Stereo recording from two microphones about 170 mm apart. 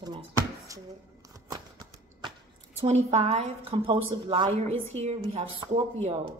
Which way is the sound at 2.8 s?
40° right (ahead or behind).